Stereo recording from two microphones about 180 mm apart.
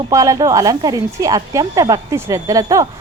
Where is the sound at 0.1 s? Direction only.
20° right (ahead or behind).